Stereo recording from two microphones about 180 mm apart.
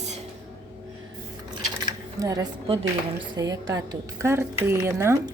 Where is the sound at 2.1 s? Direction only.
20° right (ahead or behind).